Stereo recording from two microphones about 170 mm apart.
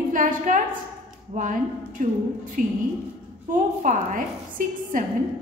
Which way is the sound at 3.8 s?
50° right (ahead or behind).